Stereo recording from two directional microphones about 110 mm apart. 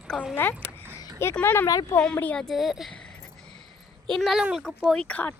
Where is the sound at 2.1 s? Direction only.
15° left (ahead or behind).